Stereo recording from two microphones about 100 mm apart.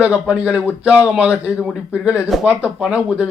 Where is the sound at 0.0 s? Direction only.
15° right (ahead or behind).